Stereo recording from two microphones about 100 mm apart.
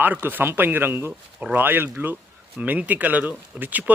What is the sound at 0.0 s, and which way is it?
Speech, 20° right (ahead or behind).